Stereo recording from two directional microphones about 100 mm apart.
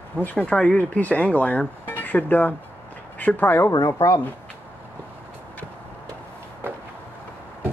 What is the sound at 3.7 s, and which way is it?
Speech, 40° left (ahead or behind).